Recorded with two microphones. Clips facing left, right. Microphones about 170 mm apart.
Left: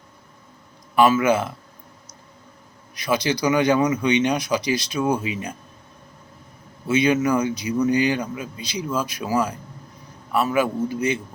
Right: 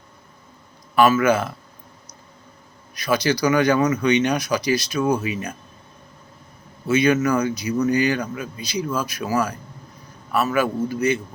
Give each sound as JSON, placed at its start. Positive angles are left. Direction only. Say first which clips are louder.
{"t": 0.9, "sound": "a man's voice", "louder": "right 1 dB", "side_deg": 15}
{"t": 2.9, "sound": "a man's voice", "louder": "right 2 dB", "side_deg": 20}
{"t": 6.8, "sound": "a man's voice", "louder": "right 1 dB", "side_deg": 20}